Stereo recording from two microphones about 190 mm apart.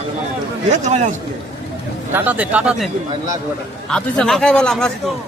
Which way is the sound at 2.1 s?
10° right (ahead or behind).